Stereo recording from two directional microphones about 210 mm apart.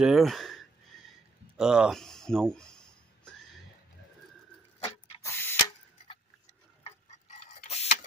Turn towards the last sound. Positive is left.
turn(degrees=30)  # may be behind; listen again after turning